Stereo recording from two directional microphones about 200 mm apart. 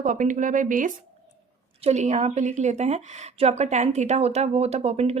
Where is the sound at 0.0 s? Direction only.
40° right (ahead or behind).